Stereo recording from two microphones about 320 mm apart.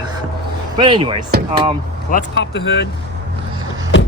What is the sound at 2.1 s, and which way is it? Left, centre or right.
Speech, left.